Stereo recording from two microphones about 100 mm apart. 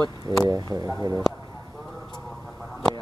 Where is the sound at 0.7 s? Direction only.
35° right (ahead or behind).